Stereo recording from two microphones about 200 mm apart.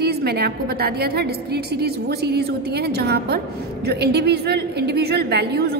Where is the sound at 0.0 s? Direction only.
55° right (ahead or behind).